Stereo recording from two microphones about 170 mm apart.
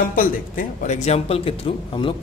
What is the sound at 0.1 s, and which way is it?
Speech, 50° left (ahead or behind).